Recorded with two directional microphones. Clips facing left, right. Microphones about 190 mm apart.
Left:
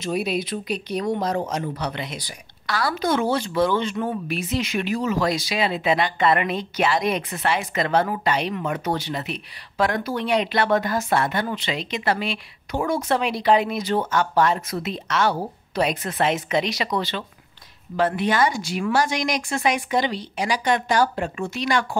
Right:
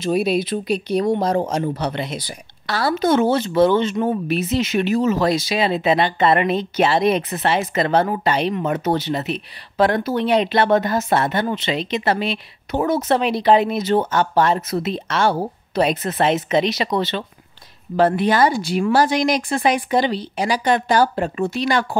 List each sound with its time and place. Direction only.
0.0 s speech: 30° right (ahead or behind)